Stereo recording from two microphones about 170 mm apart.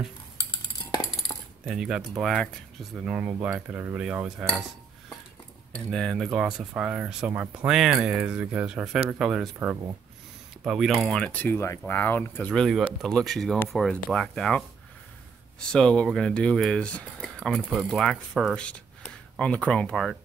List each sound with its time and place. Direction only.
0.9 s coin: 25° left (ahead or behind)
1.7 s speech: centre (ahead or behind)
3.1 s cutlery: 10° right (ahead or behind)
5.9 s speech: 5° left (ahead or behind)
9.6 s cutlery: 10° right (ahead or behind)
10.6 s speech: centre (ahead or behind)
15.7 s speech: 5° left (ahead or behind)